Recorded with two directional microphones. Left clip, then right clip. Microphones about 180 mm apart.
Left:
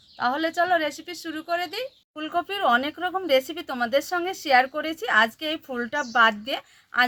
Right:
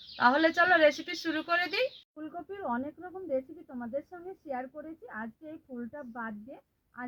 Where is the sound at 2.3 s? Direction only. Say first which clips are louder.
Left 14 dB; 45° left (ahead or behind).